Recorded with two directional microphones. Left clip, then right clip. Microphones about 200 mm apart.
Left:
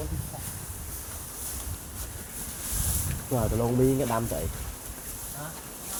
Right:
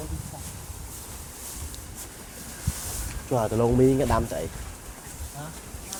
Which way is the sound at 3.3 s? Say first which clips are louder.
Right 5 dB; 40° right (ahead or behind).